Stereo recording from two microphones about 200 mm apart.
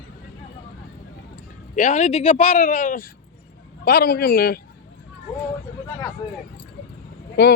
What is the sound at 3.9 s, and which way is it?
Speech, 50° left (ahead or behind).